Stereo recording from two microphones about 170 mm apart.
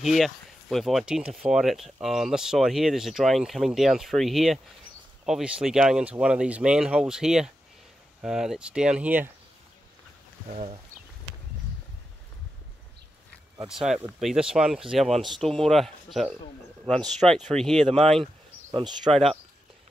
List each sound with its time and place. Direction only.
0.0 s speech: centre (ahead or behind)
10.5 s speech: 35° right (ahead or behind)
13.7 s speech: centre (ahead or behind)
18.7 s speech: 25° right (ahead or behind)